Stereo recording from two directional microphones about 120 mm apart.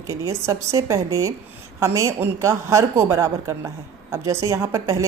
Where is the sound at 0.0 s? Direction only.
25° right (ahead or behind).